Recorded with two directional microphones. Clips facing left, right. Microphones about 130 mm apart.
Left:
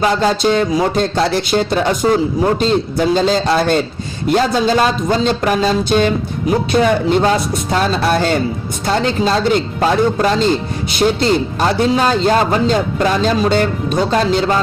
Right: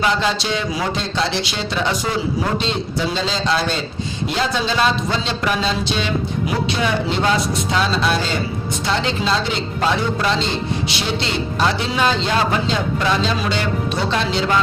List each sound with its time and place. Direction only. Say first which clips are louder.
0.0 s speech: left 6 dB; 40° left (ahead or behind)